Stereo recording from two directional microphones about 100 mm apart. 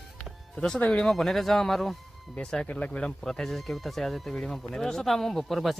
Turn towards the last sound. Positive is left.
turn(degrees=0)  # may be behind; listen again after turning